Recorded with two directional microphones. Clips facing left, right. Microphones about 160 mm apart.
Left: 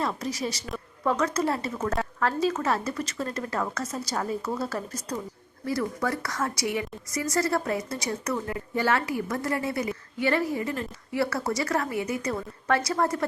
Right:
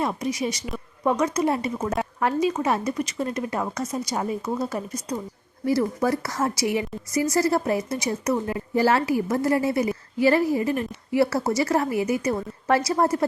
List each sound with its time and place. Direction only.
0.0 s a woman's voice: 15° right (ahead or behind)
5.6 s a woman's voice: 25° right (ahead or behind)